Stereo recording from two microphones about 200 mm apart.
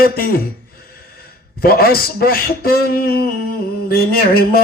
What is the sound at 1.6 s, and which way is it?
A man's voice, 50° left (ahead or behind).